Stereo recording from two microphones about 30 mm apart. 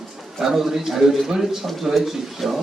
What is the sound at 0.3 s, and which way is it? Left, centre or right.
A man's voice, centre.